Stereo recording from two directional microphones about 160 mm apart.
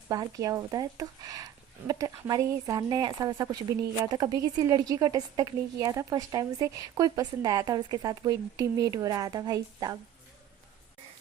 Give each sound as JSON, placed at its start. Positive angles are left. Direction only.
{"t": 0.1, "sound": "speech", "side_deg": -25}